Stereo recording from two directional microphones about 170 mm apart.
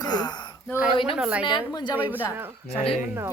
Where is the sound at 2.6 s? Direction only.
35° left (ahead or behind).